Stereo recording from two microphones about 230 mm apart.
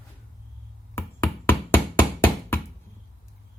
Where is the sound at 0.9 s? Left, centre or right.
Centre.